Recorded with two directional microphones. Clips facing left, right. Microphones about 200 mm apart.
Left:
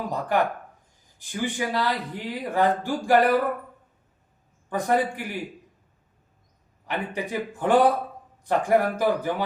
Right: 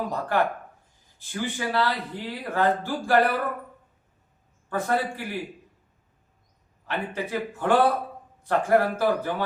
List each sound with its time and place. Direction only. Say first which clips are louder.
0.1 s speech: left 4 dB; 15° left (ahead or behind)
4.7 s speech: left 2 dB; 15° left (ahead or behind)
6.8 s speech: left 1 dB; 15° left (ahead or behind)